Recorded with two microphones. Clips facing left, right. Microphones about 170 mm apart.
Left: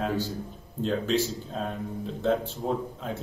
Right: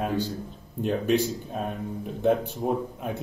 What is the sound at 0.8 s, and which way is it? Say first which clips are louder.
Speech: right 2 dB; 15° right (ahead or behind).